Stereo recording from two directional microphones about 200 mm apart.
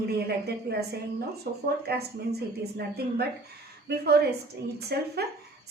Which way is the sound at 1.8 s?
55° right (ahead or behind).